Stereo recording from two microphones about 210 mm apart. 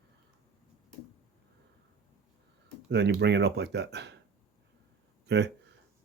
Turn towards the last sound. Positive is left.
turn(degrees=-55)  # may be behind; listen again after turning